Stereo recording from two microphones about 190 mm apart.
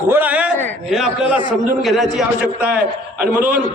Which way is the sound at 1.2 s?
30° left (ahead or behind).